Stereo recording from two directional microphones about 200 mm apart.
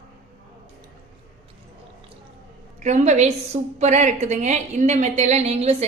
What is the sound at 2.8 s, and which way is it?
A woman's voice, 35° right (ahead or behind).